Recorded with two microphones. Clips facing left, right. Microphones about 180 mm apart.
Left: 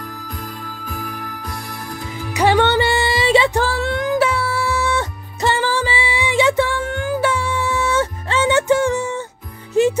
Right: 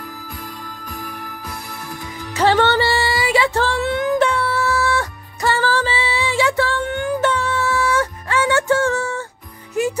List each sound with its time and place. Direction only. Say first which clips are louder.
2.3 s music: left 1 dB; 15° left (ahead or behind)
3.6 s music: right 1 dB; centre (ahead or behind); by 6.8 s 20° left (ahead or behind)
6.8 s music: even; centre (ahead or behind); by 9.9 s 25° left (ahead or behind)